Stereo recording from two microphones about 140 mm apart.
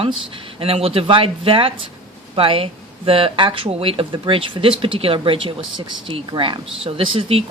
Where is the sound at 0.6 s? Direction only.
45° right (ahead or behind).